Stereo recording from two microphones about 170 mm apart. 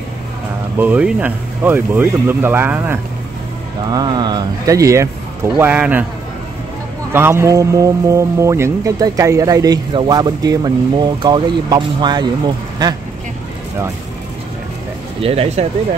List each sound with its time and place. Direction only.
0.7 s speech: 10° right (ahead or behind)
3.9 s speech: 25° right (ahead or behind); by 6.0 s 10° right (ahead or behind)
7.1 s speech: 15° right (ahead or behind)
15.1 s speech: 35° right (ahead or behind)